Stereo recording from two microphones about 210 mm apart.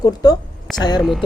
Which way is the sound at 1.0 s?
Centre (ahead or behind).